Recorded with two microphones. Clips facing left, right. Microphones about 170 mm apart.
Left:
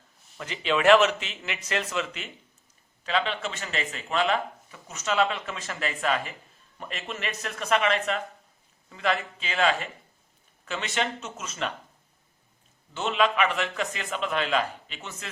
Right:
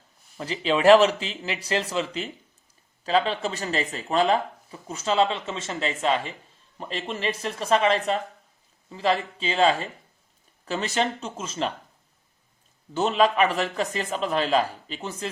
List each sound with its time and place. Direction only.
0.3 s speech: 35° right (ahead or behind)
12.9 s speech: 40° right (ahead or behind)